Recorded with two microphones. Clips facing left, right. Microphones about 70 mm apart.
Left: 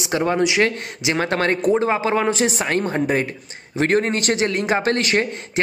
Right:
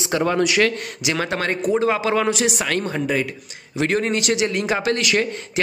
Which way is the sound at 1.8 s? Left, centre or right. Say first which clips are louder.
Even; left.